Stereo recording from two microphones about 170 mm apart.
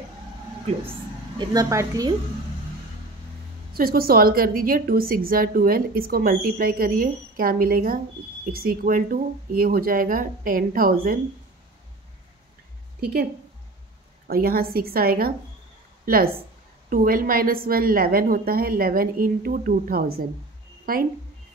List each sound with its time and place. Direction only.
1.4 s a woman's voice: 20° right (ahead or behind)
3.7 s a woman's voice: 60° right (ahead or behind)
13.0 s a woman's voice: 65° right (ahead or behind)
16.9 s a woman's voice: 55° right (ahead or behind)